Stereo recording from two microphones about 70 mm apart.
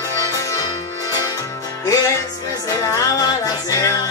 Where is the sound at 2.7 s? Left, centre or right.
Left.